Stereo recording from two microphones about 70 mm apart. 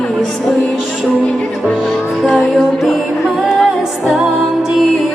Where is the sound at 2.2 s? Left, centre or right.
Centre.